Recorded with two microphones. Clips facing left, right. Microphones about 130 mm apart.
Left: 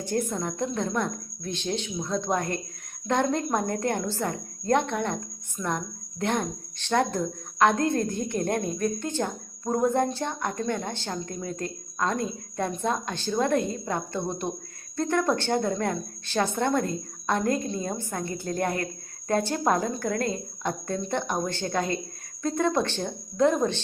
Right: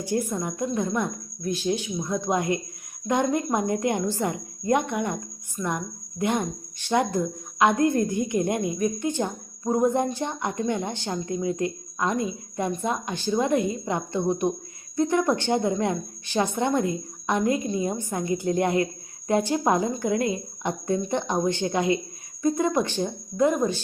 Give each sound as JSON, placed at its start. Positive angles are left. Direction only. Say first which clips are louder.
{"t": 0.0, "sound": "speech", "louder": "right 1 dB", "side_deg": -10}